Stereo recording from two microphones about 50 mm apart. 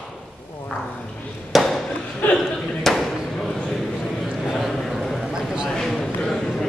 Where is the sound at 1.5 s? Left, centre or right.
Centre.